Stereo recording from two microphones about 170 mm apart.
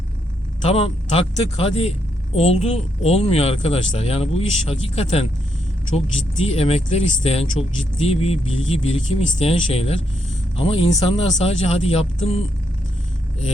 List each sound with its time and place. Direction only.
0.7 s speech: 35° left (ahead or behind)
6.4 s speech: 35° left (ahead or behind)